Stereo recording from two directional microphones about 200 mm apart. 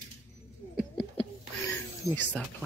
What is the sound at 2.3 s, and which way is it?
Speech, centre (ahead or behind).